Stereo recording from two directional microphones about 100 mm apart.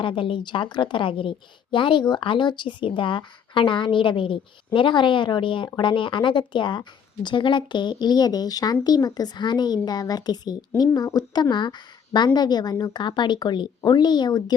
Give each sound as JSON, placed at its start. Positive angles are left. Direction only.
{"t": 0.0, "sound": "a woman's voice", "side_deg": 60}